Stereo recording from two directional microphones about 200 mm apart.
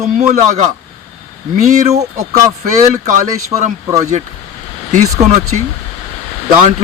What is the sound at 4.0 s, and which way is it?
A man's voice, 35° right (ahead or behind).